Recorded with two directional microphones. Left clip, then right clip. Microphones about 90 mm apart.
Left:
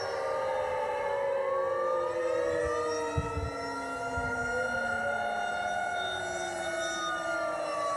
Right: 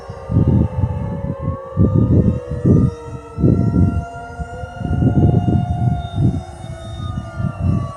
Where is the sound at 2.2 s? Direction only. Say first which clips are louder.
Right 5 dB; 50° right (ahead or behind).